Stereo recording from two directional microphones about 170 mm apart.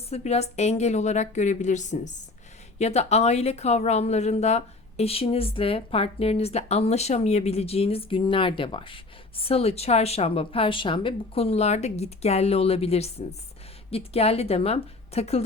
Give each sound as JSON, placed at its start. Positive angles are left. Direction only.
{"t": 0.1, "sound": "a woman's voice", "side_deg": 40}